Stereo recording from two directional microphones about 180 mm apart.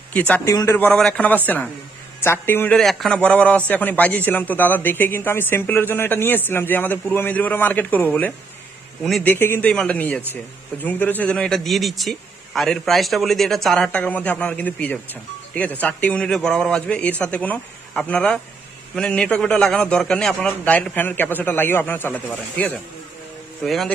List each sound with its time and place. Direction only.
0.1 s a man's voice: 10° left (ahead or behind)
9.3 s a man's voice: 10° left (ahead or behind)